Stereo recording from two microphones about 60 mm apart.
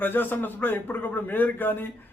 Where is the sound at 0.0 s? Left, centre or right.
Left.